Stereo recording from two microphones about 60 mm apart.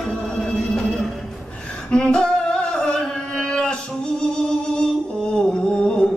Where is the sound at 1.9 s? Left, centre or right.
Centre.